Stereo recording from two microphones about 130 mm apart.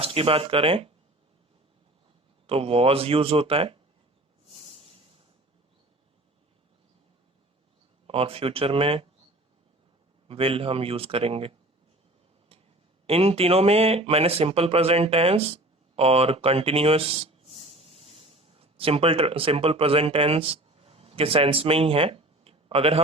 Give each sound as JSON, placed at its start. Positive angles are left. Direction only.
{"t": 0.0, "sound": "speech", "side_deg": -45}
{"t": 2.5, "sound": "speech", "side_deg": -50}
{"t": 4.4, "sound": "a sound", "side_deg": -50}
{"t": 8.0, "sound": "speech", "side_deg": -45}
{"t": 10.2, "sound": "speech", "side_deg": -45}
{"t": 13.1, "sound": "speech", "side_deg": -50}